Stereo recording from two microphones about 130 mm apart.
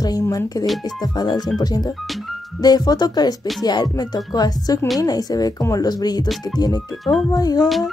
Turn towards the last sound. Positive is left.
turn(degrees=30)  # may be behind; listen again after turning